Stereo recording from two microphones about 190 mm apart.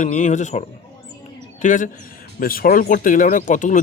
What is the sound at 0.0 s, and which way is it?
Speech, 40° left (ahead or behind).